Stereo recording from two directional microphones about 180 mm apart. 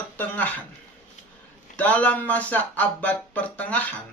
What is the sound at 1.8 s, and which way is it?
Speech, 10° left (ahead or behind).